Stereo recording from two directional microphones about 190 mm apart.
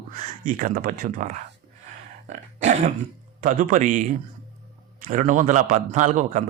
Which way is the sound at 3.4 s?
45° right (ahead or behind).